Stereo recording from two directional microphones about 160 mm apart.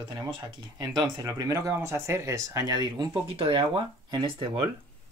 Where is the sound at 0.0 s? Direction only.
30° right (ahead or behind).